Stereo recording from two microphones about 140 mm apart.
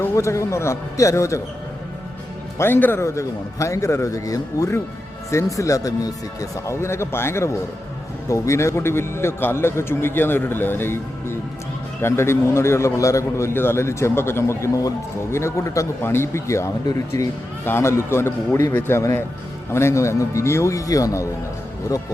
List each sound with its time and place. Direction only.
0.0 s a man's voice: 20° left (ahead or behind)
2.6 s a man's voice: 15° left (ahead or behind)